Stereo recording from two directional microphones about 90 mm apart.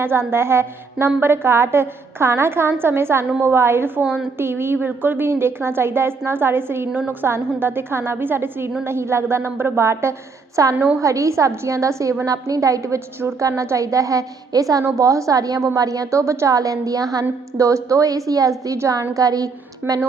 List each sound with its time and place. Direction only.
0.0 s a woman's voice: 25° right (ahead or behind)
4.0 s a woman's voice: 10° right (ahead or behind)
4.4 s a woman's voice: 25° right (ahead or behind); by 19.5 s 40° right (ahead or behind)
19.8 s a woman's voice: 25° right (ahead or behind)